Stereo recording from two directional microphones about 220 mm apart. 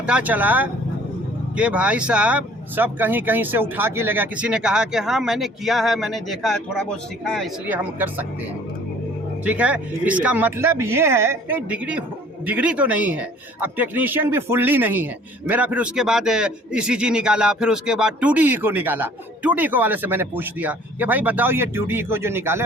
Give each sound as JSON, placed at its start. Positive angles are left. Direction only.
{"t": 0.0, "sound": "a man's voice", "side_deg": -5}
{"t": 9.4, "sound": "a man's voice", "side_deg": -5}